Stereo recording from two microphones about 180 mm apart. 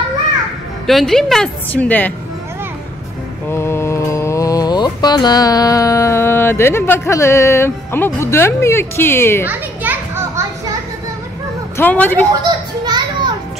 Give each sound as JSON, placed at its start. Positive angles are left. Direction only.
{"t": 0.8, "sound": "a woman's voice", "side_deg": 0}
{"t": 3.4, "sound": "mantra", "side_deg": 15}
{"t": 9.5, "sound": "children playing", "side_deg": -10}
{"t": 11.7, "sound": "a woman's voice", "side_deg": 10}
{"t": 12.4, "sound": "children playing", "side_deg": -25}